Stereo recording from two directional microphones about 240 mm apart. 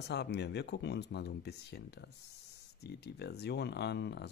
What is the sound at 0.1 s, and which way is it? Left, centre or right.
Speech, left.